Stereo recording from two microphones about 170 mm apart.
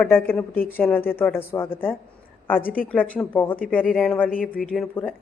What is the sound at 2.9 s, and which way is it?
A woman's voice, 10° left (ahead or behind).